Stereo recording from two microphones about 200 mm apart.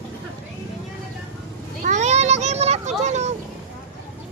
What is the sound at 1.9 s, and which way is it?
A child's voice, 35° right (ahead or behind).